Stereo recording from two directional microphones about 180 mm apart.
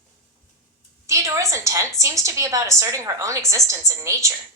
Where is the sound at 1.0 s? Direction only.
15° right (ahead or behind).